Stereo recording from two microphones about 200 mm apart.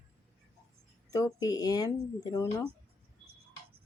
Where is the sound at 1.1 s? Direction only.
20° left (ahead or behind).